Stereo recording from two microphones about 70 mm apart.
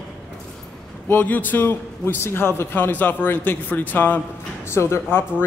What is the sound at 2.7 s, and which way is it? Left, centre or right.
A man's voice, left.